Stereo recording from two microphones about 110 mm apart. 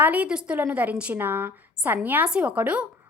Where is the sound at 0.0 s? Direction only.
10° right (ahead or behind).